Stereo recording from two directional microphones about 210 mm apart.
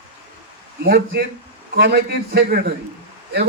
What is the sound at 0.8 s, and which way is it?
A man's voice, 50° right (ahead or behind).